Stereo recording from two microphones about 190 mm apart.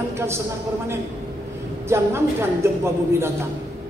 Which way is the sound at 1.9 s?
15° right (ahead or behind).